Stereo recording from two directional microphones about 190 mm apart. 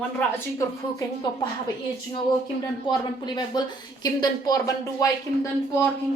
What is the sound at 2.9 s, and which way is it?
Speech, 20° left (ahead or behind).